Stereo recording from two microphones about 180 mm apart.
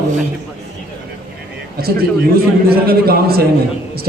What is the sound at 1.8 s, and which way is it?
A man's voice, 60° right (ahead or behind).